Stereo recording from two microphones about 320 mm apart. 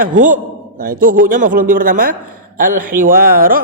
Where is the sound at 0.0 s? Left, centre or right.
Right.